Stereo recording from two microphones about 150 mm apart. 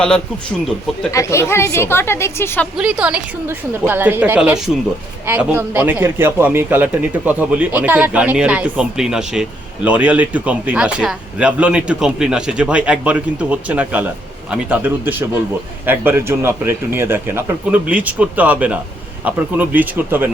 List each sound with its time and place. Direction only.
1.1 s a woman's voice: 20° left (ahead or behind)
2.7 s a man's voice: 5° right (ahead or behind)